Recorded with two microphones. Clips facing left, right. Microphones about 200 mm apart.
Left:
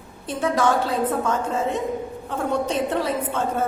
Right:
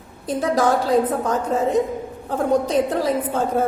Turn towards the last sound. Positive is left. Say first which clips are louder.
# right 4 dB
turn(degrees=-35)  # may be behind; listen again after turning